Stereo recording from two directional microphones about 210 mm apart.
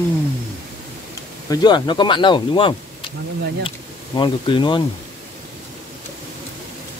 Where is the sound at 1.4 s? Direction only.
20° left (ahead or behind).